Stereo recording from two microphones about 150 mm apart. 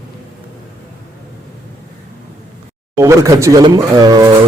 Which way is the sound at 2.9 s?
20° right (ahead or behind).